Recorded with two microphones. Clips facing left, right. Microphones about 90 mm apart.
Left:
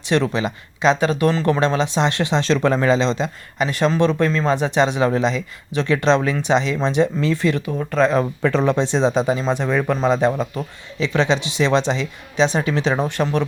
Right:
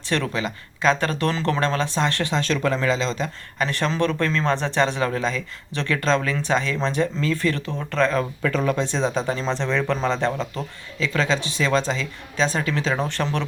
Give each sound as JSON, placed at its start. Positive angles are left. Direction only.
{"t": 0.1, "sound": "speech", "side_deg": 20}
{"t": 3.6, "sound": "speech", "side_deg": 10}
{"t": 8.4, "sound": "speech", "side_deg": 30}
{"t": 11.0, "sound": "speech", "side_deg": 25}
{"t": 13.1, "sound": "speech", "side_deg": 15}